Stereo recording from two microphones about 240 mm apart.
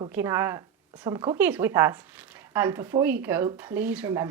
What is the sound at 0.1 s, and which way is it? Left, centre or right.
Speech, centre.